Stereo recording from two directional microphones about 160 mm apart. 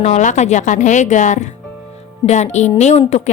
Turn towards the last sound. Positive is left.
turn(degrees=45)  # may be behind; listen again after turning